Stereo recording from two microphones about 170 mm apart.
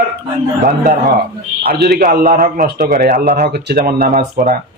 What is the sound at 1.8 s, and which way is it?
Speech, 65° right (ahead or behind).